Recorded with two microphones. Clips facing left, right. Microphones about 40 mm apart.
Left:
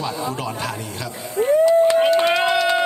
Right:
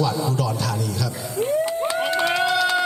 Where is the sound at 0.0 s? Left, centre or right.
Left.